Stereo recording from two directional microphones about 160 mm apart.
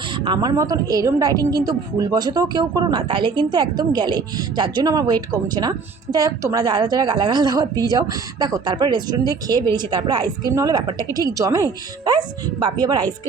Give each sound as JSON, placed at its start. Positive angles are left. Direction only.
{"t": 0.3, "sound": "a woman's voice", "side_deg": -25}